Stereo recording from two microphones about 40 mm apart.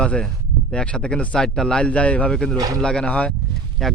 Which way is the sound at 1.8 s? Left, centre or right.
Left.